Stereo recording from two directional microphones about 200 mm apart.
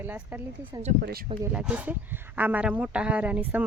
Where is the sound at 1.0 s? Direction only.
50° right (ahead or behind).